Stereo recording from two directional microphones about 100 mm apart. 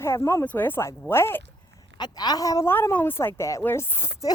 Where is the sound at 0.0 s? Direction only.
25° left (ahead or behind).